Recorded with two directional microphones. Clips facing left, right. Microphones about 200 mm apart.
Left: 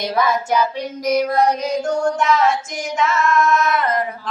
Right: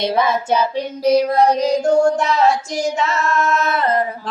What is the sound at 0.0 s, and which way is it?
Child singing, 25° right (ahead or behind).